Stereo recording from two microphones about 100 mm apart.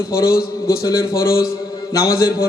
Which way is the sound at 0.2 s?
35° left (ahead or behind).